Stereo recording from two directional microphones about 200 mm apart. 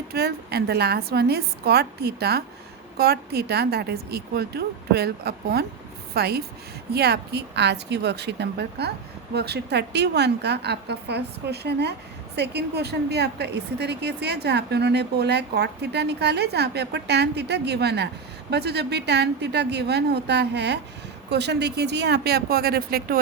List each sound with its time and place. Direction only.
0.1 s a woman's voice: 50° right (ahead or behind)